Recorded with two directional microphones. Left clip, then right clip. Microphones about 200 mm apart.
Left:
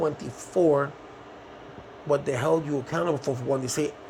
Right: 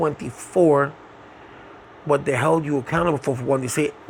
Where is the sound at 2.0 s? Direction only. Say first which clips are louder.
Right 5 dB; 50° right (ahead or behind).